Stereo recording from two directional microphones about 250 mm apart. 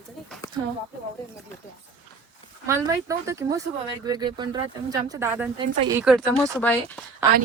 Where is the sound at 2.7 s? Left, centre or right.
Centre.